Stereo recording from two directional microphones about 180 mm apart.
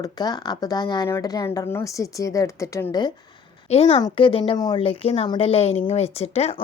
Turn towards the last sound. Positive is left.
turn(degrees=35)  # may be behind; listen again after turning